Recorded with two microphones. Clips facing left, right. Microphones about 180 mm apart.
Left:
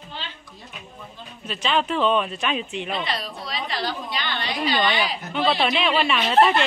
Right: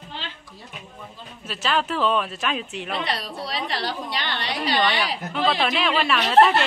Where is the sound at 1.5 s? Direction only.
5° right (ahead or behind).